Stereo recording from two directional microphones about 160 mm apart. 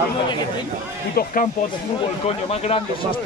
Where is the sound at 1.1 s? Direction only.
60° left (ahead or behind).